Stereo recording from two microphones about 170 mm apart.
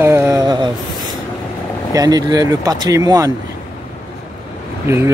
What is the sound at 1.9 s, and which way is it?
Speech, 20° right (ahead or behind).